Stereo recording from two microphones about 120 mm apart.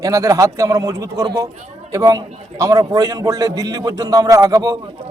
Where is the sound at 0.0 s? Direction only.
25° right (ahead or behind).